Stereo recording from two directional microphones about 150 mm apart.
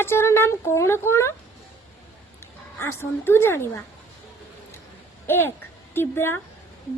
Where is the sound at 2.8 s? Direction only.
15° left (ahead or behind).